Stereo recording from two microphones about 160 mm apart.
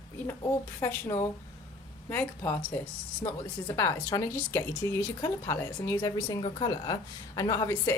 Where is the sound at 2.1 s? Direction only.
15° left (ahead or behind).